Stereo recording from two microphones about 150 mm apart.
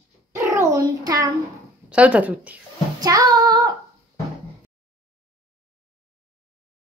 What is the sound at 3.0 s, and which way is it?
Child singing, 25° right (ahead or behind).